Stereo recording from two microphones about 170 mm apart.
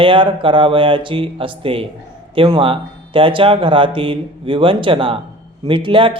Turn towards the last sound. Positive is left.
turn(degrees=-30)  # may be behind; listen again after turning